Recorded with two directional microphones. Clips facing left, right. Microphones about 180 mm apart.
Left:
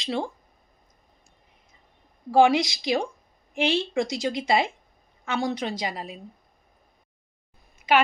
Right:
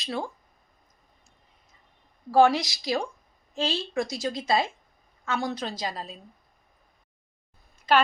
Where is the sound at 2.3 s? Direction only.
15° left (ahead or behind).